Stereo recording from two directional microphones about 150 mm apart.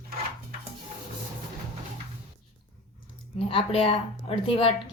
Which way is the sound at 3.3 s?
40° left (ahead or behind).